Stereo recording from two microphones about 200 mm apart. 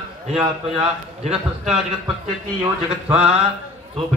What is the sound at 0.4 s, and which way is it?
A man's voice, 30° right (ahead or behind).